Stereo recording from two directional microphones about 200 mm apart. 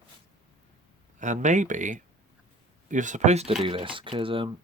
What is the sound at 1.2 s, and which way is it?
Speech, 40° right (ahead or behind).